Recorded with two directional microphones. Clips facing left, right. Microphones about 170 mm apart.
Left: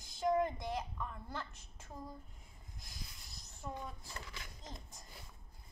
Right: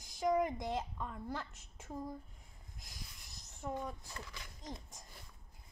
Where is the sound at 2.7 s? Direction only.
20° right (ahead or behind).